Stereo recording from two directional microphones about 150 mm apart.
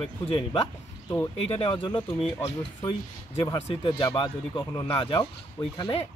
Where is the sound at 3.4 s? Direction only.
30° left (ahead or behind).